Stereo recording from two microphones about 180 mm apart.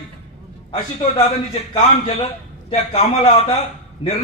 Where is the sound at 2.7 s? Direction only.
35° left (ahead or behind).